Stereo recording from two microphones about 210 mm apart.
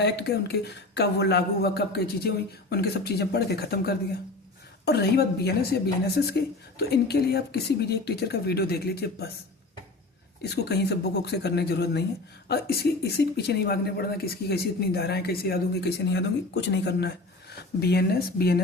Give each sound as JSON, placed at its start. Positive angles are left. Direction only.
{"t": 0.0, "sound": "speech", "side_deg": 50}
{"t": 10.4, "sound": "speech", "side_deg": 50}